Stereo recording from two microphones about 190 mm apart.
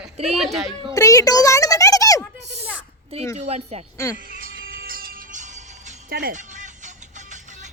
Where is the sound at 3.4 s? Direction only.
35° right (ahead or behind).